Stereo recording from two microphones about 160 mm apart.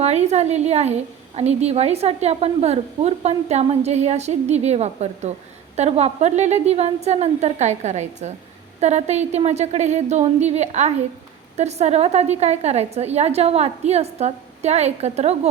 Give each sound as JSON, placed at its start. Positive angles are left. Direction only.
{"t": 0.0, "sound": "a woman's voice", "side_deg": -45}